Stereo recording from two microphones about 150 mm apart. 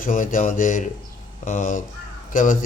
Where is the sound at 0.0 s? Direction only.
60° left (ahead or behind).